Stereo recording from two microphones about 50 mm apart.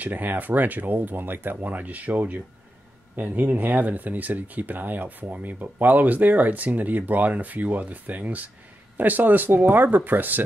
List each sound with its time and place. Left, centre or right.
0.0 s speech: right